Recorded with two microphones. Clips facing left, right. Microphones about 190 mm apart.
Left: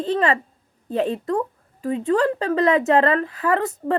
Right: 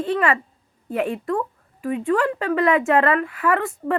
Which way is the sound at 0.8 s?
25° left (ahead or behind).